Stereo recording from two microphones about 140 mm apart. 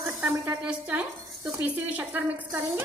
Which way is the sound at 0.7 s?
10° right (ahead or behind).